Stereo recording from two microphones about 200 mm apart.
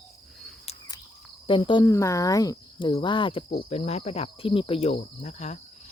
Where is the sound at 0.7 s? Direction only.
30° left (ahead or behind).